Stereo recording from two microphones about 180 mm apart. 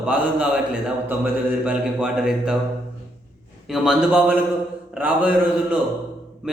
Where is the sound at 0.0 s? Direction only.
5° right (ahead or behind).